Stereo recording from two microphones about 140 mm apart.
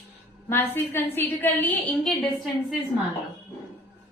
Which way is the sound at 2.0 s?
Centre (ahead or behind).